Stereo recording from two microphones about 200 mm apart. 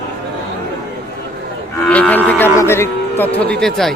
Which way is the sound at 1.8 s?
5° left (ahead or behind).